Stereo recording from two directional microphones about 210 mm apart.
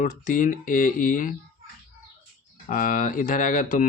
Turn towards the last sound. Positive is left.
turn(degrees=40)  # may be behind; listen again after turning